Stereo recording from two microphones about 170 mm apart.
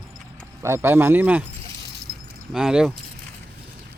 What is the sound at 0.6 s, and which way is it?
Speech, 15° right (ahead or behind).